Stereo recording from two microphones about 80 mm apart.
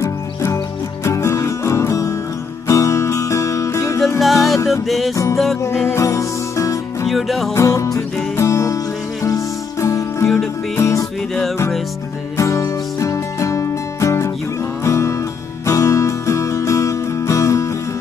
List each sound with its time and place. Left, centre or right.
0.0 s music: left
4.2 s music: centre
5.1 s music: left
5.8 s music: left
6.0 s music: left
7.1 s music: centre
7.5 s music: left
12.4 s music: left